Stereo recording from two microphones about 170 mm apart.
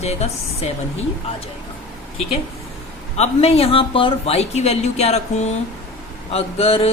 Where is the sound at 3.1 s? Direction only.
40° left (ahead or behind).